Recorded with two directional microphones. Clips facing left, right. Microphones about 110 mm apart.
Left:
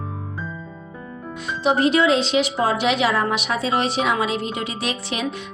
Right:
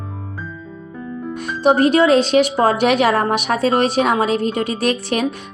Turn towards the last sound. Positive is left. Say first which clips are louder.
# right 7 dB
turn(degrees=-50)  # may be behind; listen again after turning